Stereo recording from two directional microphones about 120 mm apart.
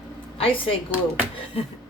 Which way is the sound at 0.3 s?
50° left (ahead or behind).